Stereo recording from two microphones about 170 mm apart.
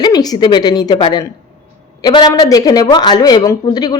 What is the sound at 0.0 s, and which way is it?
A woman's voice, 25° left (ahead or behind).